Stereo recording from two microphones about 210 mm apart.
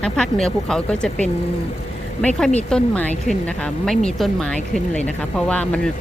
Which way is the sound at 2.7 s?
Centre (ahead or behind).